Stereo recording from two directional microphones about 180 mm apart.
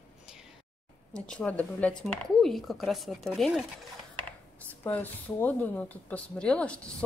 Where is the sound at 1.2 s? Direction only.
5° left (ahead or behind).